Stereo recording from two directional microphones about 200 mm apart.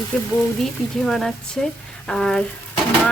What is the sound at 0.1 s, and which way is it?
A woman's voice, 5° left (ahead or behind).